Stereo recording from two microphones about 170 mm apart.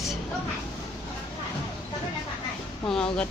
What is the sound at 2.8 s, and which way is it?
Speech, 5° left (ahead or behind).